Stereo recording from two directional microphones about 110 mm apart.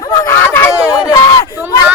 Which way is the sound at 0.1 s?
25° left (ahead or behind).